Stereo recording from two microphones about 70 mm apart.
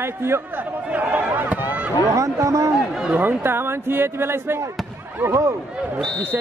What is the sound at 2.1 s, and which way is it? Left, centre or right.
Speech, right.